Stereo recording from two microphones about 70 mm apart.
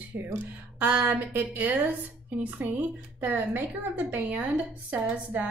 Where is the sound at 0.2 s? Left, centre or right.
Right.